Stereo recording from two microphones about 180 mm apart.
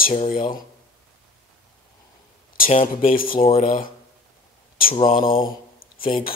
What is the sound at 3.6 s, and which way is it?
Speech, 50° left (ahead or behind).